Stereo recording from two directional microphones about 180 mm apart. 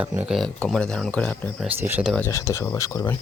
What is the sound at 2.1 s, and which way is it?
Speech, 15° left (ahead or behind).